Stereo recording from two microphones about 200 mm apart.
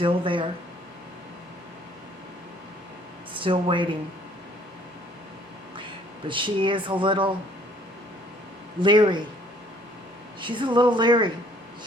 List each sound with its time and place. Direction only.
0.0 s speech: 25° right (ahead or behind)
3.3 s speech: 25° right (ahead or behind)
6.2 s speech: 25° right (ahead or behind)
8.8 s speech: 25° right (ahead or behind)
10.4 s speech: 25° right (ahead or behind)